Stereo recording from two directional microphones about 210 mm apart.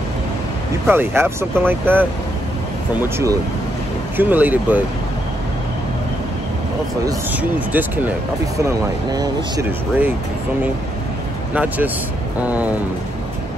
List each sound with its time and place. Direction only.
0.8 s speech: 10° right (ahead or behind)
7.1 s speech: 10° right (ahead or behind)
11.5 s speech: 10° right (ahead or behind)